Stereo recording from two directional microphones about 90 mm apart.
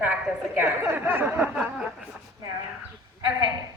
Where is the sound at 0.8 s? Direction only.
25° right (ahead or behind).